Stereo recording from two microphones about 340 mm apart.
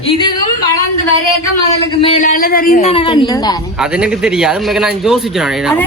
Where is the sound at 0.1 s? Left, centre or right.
Centre.